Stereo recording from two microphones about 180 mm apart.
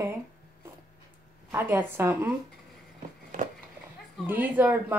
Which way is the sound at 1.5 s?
10° right (ahead or behind).